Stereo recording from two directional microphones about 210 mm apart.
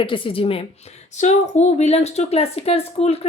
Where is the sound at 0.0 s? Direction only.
25° left (ahead or behind).